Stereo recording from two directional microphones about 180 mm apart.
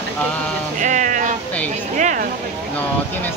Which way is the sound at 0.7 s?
45° right (ahead or behind).